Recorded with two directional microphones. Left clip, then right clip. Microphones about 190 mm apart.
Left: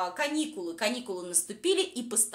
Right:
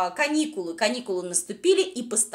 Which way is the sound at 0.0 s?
25° right (ahead or behind).